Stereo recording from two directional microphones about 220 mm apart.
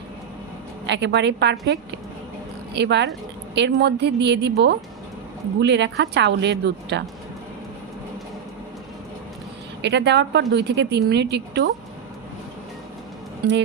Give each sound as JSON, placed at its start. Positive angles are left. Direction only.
{"t": 0.9, "sound": "a woman's voice", "side_deg": -50}
{"t": 2.7, "sound": "a woman's voice", "side_deg": -50}
{"t": 9.8, "sound": "a woman's voice", "side_deg": -50}